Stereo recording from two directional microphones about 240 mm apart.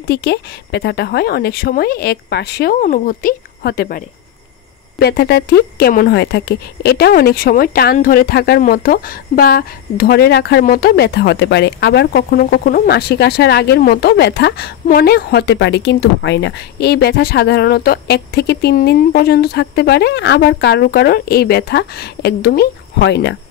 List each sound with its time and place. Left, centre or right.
0.0 s speech: left